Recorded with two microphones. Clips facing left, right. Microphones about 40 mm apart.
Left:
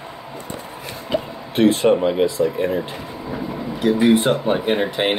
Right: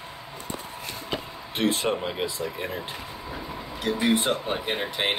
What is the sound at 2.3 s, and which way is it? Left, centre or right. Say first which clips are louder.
Speech: left 12 dB; centre.